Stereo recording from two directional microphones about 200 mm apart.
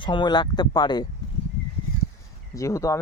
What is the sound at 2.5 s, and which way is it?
Speech, 15° left (ahead or behind).